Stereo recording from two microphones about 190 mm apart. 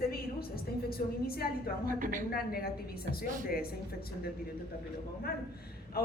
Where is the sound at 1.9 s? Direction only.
45° right (ahead or behind).